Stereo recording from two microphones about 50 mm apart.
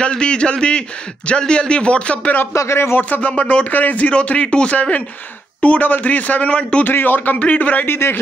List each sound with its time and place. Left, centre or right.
0.0 s a man's voice: centre
2.5 s speech: left
3.0 s a man's voice: left
6.8 s a man's voice: left
7.8 s speech: left